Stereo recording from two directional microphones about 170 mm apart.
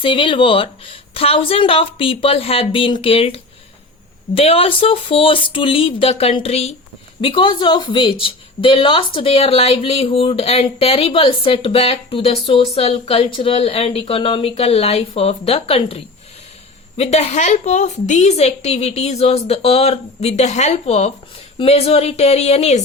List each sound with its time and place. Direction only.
0.0 s speech: 30° left (ahead or behind)
17.0 s speech: 40° left (ahead or behind)